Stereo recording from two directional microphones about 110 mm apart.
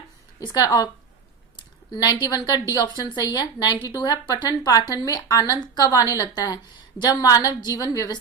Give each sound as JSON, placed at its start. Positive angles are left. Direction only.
{"t": 0.3, "sound": "speech", "side_deg": 35}
{"t": 1.5, "sound": "a sound", "side_deg": 40}
{"t": 2.5, "sound": "speech", "side_deg": 40}